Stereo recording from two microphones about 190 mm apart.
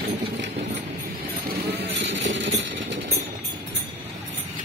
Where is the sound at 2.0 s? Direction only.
65° right (ahead or behind).